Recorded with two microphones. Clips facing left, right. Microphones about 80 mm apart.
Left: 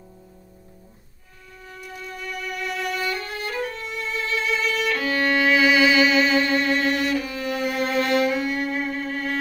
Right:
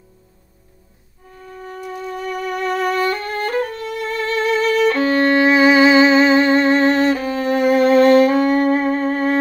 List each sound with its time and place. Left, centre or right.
1.5 s music: right